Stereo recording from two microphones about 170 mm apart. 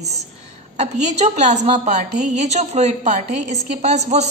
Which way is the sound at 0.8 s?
40° right (ahead or behind).